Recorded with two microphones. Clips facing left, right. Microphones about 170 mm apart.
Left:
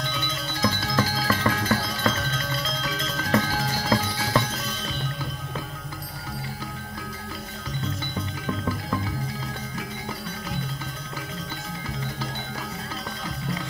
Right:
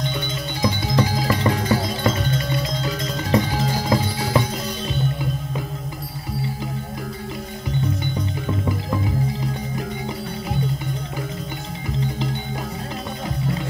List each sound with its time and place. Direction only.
0.6 s music: 20° right (ahead or behind)
8.5 s music: 20° right (ahead or behind)